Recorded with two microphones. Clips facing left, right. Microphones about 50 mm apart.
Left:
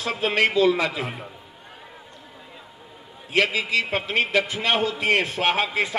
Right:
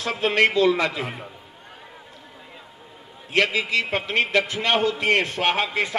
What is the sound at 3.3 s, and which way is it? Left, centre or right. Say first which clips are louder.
A man's voice: even; centre.